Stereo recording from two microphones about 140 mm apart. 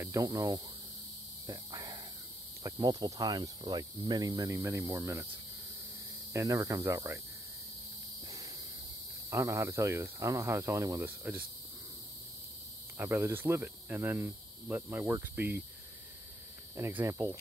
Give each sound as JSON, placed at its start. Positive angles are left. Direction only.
{"t": 0.0, "sound": "speech", "side_deg": -25}
{"t": 1.5, "sound": "a sound", "side_deg": -25}
{"t": 2.6, "sound": "cricket", "side_deg": -25}
{"t": 6.3, "sound": "cricket", "side_deg": -25}
{"t": 9.3, "sound": "cricket", "side_deg": -20}
{"t": 12.9, "sound": "cricket", "side_deg": -15}
{"t": 16.7, "sound": "cricket", "side_deg": -20}